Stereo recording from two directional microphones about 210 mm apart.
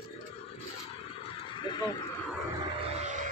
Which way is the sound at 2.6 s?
30° right (ahead or behind).